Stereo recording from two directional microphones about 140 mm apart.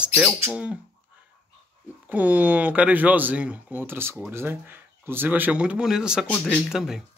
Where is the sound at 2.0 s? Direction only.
10° right (ahead or behind).